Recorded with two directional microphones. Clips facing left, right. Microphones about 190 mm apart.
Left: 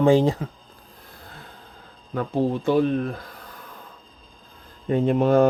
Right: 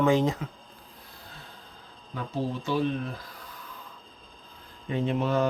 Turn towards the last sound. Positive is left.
turn(degrees=50)  # may be behind; listen again after turning